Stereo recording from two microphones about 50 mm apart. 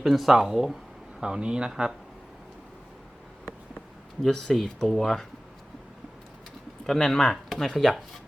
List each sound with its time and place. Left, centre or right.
0.0 s speech: centre
1.7 s speech: centre
4.2 s speech: centre
6.8 s speech: centre